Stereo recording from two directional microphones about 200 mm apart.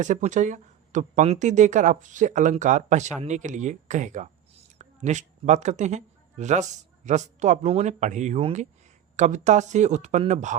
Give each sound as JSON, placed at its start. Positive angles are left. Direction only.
{"t": 0.0, "sound": "speech", "side_deg": -40}